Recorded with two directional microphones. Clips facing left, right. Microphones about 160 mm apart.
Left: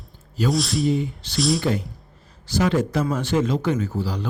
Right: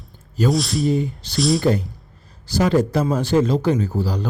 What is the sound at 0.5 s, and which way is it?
Speech, centre (ahead or behind).